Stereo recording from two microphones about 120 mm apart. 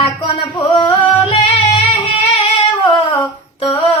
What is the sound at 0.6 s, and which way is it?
Singing, 45° left (ahead or behind).